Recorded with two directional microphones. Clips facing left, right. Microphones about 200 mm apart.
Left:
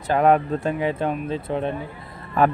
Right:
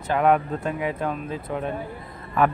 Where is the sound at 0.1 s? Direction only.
35° left (ahead or behind).